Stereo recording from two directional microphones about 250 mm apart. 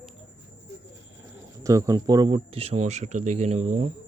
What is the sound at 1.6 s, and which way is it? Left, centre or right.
Speech, centre.